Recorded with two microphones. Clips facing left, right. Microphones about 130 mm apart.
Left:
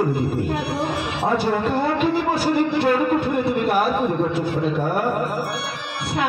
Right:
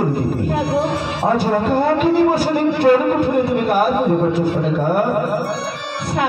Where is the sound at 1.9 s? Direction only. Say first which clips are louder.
Right 6 dB; 40° right (ahead or behind).